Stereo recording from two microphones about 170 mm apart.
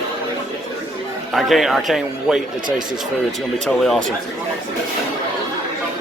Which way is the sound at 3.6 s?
Centre (ahead or behind).